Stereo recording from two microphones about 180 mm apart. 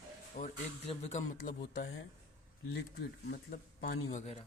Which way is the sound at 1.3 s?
60° left (ahead or behind).